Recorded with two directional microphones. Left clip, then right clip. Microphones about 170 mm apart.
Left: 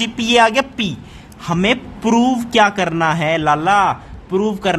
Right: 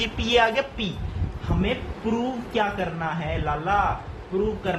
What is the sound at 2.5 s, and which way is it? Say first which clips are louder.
Speech: left 11 dB; 60° left (ahead or behind).